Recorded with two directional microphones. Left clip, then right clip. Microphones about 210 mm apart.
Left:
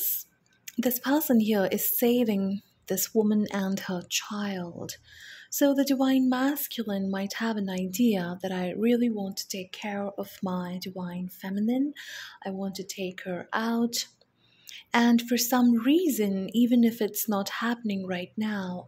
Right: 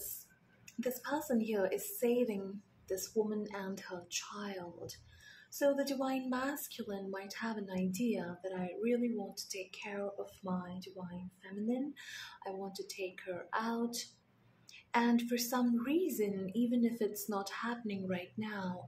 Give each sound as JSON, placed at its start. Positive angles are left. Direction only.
{"t": 0.7, "sound": "a woman's voice", "side_deg": 45}